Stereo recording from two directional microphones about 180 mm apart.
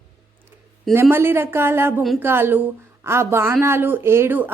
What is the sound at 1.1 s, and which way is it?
Speech, 15° right (ahead or behind).